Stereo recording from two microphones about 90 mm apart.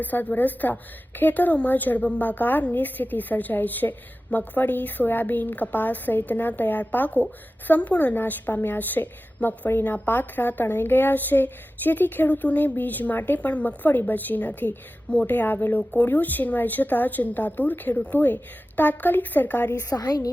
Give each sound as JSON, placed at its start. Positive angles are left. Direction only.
{"t": 0.0, "sound": "a woman's voice", "side_deg": 20}
{"t": 19.9, "sound": "a woman's voice", "side_deg": 45}